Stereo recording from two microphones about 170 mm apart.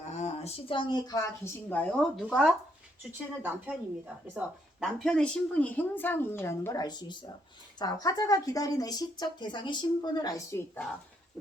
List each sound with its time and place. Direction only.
0.0 s speech: 40° left (ahead or behind); by 1.3 s 20° left (ahead or behind)
1.7 s a woman's voice: 10° left (ahead or behind)